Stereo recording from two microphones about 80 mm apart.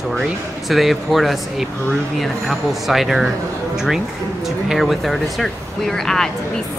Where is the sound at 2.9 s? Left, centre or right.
Centre.